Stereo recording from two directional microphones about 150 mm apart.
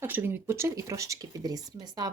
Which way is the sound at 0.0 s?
15° right (ahead or behind).